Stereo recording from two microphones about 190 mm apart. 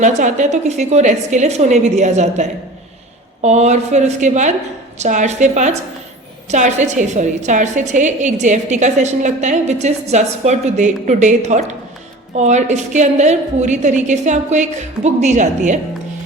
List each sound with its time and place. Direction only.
0.0 s a woman's voice: 40° right (ahead or behind)